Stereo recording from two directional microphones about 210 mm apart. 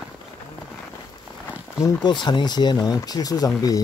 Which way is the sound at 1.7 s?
20° left (ahead or behind).